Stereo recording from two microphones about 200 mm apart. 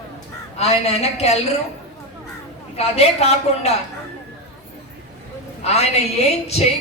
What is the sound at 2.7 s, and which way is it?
Speech, 30° left (ahead or behind).